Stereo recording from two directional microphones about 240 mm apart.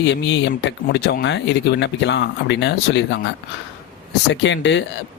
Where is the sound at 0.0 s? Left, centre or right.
Left.